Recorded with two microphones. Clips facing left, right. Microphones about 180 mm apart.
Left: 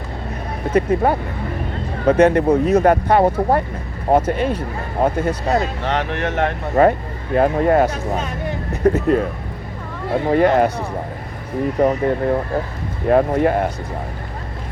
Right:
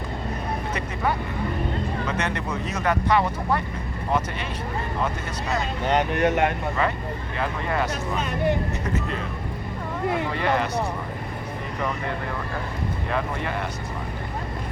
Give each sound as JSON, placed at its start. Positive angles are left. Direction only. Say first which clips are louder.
{"t": 0.7, "sound": "speech", "louder": "left 13 dB", "side_deg": 55}
{"t": 6.1, "sound": "speech", "louder": "right 1 dB", "side_deg": 0}
{"t": 6.8, "sound": "speech", "louder": "left 11 dB", "side_deg": 50}
{"t": 10.2, "sound": "speech", "louder": "left 10 dB", "side_deg": 50}
{"t": 11.8, "sound": "speech", "louder": "left 12 dB", "side_deg": 45}